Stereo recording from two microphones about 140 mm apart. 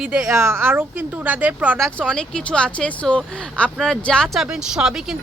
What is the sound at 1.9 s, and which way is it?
Speech, 5° left (ahead or behind).